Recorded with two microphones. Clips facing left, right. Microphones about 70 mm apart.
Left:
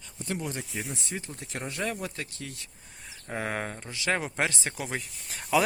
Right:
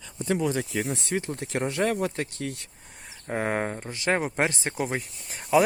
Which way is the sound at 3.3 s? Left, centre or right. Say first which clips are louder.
Right 5 dB; right.